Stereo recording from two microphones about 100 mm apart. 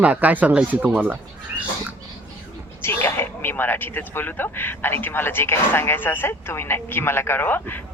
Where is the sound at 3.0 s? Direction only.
20° left (ahead or behind).